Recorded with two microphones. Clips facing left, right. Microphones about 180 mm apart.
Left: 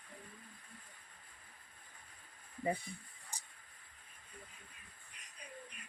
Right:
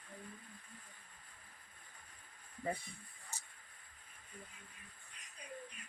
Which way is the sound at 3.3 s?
15° left (ahead or behind).